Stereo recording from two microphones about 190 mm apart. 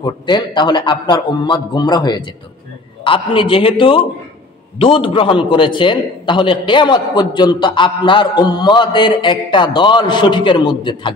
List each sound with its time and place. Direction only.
0.0 s a man's voice: 25° left (ahead or behind)